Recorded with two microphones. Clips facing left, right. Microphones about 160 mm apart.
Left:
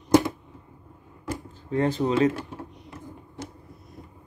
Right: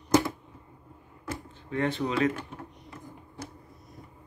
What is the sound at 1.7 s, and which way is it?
Speech, 35° left (ahead or behind).